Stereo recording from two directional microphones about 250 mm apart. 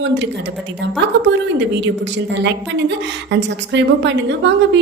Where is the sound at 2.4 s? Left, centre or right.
Right.